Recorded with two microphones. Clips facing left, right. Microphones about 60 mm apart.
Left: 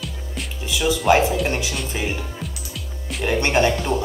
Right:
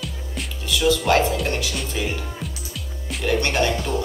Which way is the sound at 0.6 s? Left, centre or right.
Centre.